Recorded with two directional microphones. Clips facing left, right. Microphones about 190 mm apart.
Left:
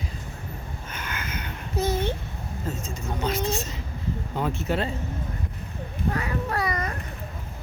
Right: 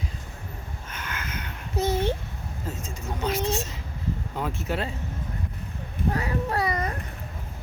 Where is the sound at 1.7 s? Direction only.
30° right (ahead or behind).